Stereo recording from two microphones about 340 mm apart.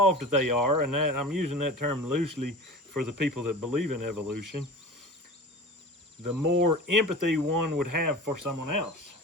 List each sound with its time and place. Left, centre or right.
0.0 s speech: right
6.2 s speech: right